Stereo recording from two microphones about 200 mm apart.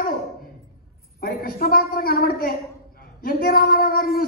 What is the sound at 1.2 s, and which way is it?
A man's voice, 45° left (ahead or behind).